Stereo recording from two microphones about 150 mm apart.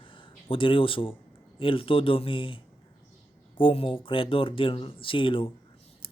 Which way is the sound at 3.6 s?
35° left (ahead or behind).